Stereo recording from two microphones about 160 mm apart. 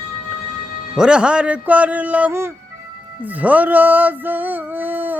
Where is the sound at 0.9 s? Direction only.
5° right (ahead or behind).